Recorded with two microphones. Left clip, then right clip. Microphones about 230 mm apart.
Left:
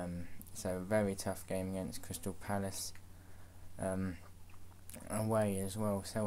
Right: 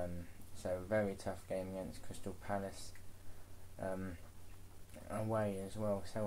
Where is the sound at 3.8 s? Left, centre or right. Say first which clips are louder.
Left 3 dB; left.